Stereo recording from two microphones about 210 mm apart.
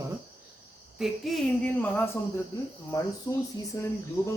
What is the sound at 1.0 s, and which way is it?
Cricket, centre (ahead or behind).